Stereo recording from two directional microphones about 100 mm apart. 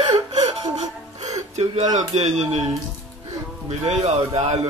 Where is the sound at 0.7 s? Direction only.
40° right (ahead or behind).